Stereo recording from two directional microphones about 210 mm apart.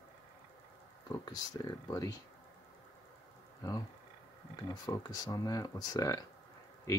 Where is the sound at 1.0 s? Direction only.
15° left (ahead or behind).